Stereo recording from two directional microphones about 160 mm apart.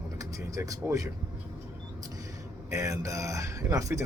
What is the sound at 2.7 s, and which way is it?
Speech, 20° right (ahead or behind).